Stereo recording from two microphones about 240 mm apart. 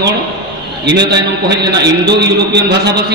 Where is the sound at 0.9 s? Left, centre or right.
Right.